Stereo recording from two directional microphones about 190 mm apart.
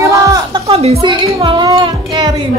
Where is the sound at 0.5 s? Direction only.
30° right (ahead or behind).